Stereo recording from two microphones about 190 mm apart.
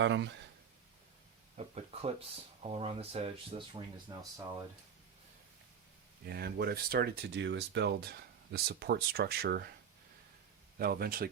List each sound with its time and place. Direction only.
0.0 s speech: 70° right (ahead or behind)
1.5 s speech: 35° right (ahead or behind)
6.2 s speech: 55° right (ahead or behind)
10.8 s speech: 50° right (ahead or behind)